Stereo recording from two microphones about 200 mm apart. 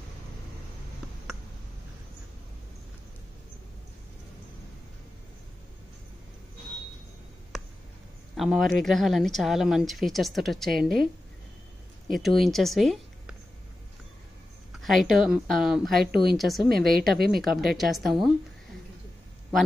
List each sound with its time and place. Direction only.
8.4 s speech: centre (ahead or behind)
12.1 s speech: centre (ahead or behind)
14.7 s speech: centre (ahead or behind)
16.1 s speech: 50° right (ahead or behind)
16.3 s speech: centre (ahead or behind)